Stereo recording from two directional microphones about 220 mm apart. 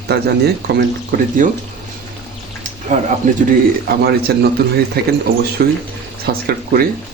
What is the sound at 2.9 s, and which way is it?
Speech, 35° right (ahead or behind).